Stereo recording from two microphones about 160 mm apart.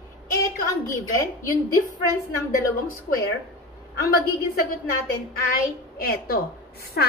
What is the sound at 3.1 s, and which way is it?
Speech, 90° left.